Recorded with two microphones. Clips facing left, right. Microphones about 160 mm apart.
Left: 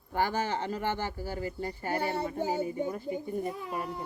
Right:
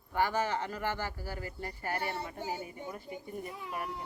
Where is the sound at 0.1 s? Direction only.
35° left (ahead or behind).